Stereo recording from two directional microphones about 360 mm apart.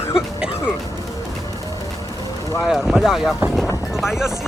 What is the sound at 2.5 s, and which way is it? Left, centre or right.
Speech, centre.